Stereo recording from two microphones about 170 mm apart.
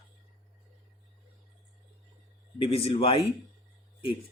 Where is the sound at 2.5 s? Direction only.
30° left (ahead or behind).